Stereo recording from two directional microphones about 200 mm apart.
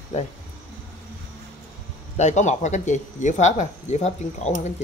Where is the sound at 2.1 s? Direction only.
35° left (ahead or behind).